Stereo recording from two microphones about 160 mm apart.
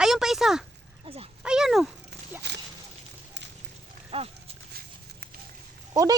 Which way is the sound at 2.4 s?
90° right.